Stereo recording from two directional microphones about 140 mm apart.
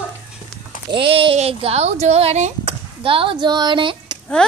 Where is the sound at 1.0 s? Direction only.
40° right (ahead or behind).